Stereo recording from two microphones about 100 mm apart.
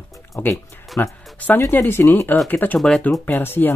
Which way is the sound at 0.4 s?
30° left (ahead or behind).